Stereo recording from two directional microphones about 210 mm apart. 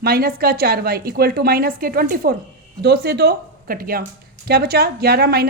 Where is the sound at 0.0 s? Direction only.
45° right (ahead or behind).